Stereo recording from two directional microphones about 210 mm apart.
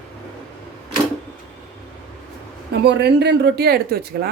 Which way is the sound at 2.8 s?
55° right (ahead or behind).